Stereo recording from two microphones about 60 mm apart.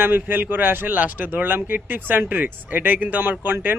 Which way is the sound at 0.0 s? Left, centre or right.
Right.